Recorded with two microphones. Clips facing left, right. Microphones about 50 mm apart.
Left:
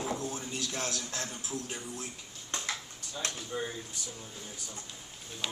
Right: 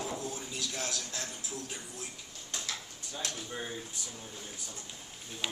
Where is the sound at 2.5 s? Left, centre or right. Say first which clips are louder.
Left 3 dB; left.